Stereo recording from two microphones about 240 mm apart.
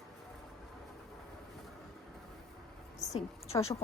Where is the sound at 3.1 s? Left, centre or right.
Centre.